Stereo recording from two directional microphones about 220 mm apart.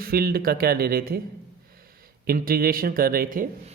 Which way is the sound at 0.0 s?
45° right (ahead or behind).